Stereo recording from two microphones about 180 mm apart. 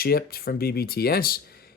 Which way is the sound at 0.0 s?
55° left (ahead or behind).